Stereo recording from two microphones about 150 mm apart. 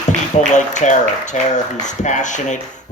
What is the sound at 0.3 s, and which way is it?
Speech, 55° left (ahead or behind).